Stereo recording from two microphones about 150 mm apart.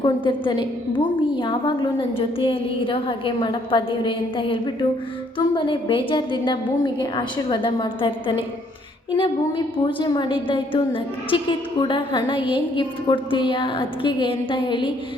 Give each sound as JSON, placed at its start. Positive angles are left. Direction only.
{"t": 0.0, "sound": "a woman's voice", "side_deg": 30}